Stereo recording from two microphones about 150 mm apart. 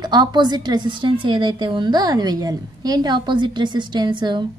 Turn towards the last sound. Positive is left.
turn(degrees=-30)  # may be behind; listen again after turning